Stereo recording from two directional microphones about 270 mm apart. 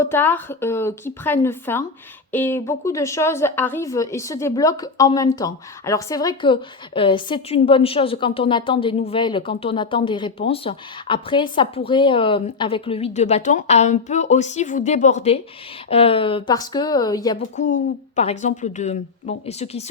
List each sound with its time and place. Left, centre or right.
0.0 s a woman's voice: centre
17.6 s a woman's voice: left